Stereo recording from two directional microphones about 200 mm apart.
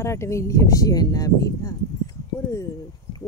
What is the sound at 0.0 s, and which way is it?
Speech, 15° left (ahead or behind).